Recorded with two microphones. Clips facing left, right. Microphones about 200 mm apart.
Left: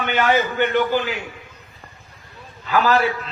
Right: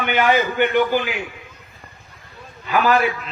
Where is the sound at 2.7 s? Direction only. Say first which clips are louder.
Even; 15° right (ahead or behind).